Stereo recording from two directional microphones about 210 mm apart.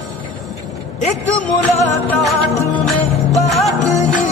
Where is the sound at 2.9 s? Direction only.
Centre (ahead or behind).